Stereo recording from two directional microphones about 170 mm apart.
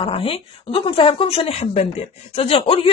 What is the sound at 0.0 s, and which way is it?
Speech, 35° left (ahead or behind).